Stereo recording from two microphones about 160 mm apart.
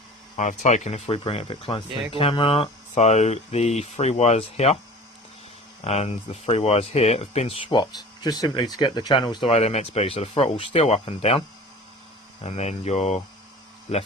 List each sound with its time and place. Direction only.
0.3 s speech: 45° left (ahead or behind)
5.8 s speech: 40° left (ahead or behind)
9.5 s speech: 40° left (ahead or behind)
12.4 s hum: 45° left (ahead or behind)